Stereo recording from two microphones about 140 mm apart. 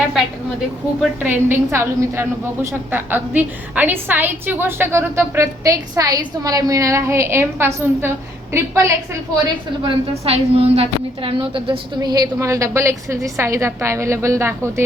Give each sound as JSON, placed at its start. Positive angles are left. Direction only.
{"t": 1.2, "sound": "a woman's voice", "side_deg": -15}
{"t": 9.8, "sound": "a woman's voice", "side_deg": -45}